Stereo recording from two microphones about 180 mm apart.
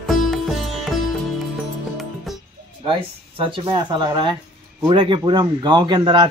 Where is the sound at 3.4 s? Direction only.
25° right (ahead or behind).